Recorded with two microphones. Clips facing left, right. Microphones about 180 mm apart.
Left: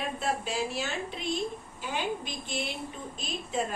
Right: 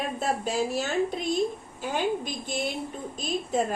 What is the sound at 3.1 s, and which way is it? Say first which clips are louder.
Speech: right 6 dB; 40° right (ahead or behind).